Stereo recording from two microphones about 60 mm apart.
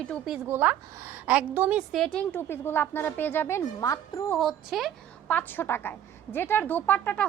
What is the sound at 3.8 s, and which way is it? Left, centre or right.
Speech, left.